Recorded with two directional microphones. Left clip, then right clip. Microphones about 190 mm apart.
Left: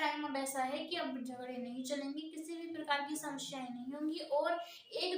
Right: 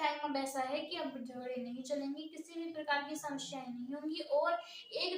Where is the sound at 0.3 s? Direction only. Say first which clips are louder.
Right 1 dB; 20° left (ahead or behind).